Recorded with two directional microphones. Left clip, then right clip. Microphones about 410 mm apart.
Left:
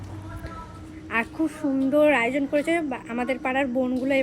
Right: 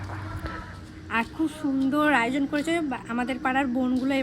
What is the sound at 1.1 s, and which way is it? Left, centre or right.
A woman's voice, centre.